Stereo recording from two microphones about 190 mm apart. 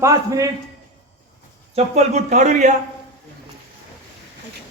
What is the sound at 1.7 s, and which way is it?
Speech, 35° right (ahead or behind).